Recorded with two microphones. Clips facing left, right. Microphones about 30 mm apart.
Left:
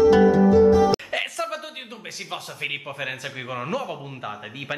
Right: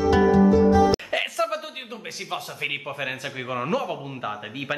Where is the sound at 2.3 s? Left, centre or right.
Centre.